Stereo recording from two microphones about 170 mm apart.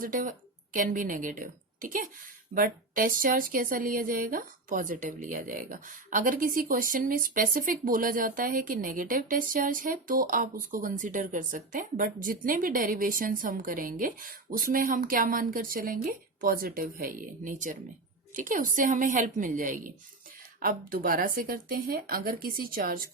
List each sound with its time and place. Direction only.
0.0 s a woman's voice: 50° right (ahead or behind)